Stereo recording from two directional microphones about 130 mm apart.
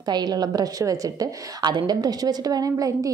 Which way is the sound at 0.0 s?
30° right (ahead or behind).